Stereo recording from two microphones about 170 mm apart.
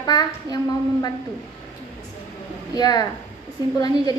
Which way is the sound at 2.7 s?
25° left (ahead or behind).